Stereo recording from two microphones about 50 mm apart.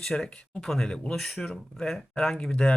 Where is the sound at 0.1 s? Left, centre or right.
Centre.